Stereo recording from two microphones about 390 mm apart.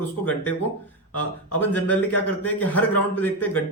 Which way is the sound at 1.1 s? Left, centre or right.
Left.